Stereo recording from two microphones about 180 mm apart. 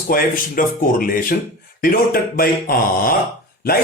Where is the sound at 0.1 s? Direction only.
50° left (ahead or behind).